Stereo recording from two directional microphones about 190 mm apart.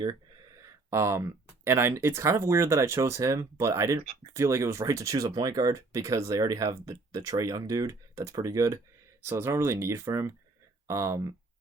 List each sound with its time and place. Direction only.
0.9 s speech: 15° right (ahead or behind)